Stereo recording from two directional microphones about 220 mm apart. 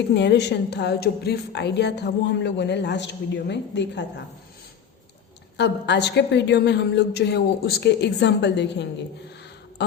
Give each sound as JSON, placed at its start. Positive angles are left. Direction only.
{"t": 0.1, "sound": "a woman's voice", "side_deg": 50}
{"t": 5.5, "sound": "a woman's voice", "side_deg": 50}